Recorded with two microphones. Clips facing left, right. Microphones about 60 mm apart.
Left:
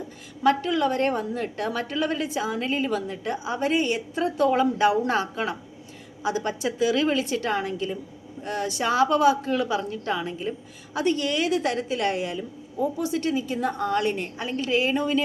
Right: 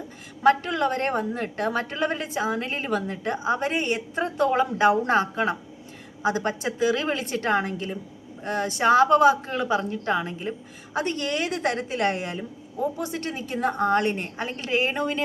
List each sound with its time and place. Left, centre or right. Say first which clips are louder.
0.4 s a woman's voice: right 1 dB; right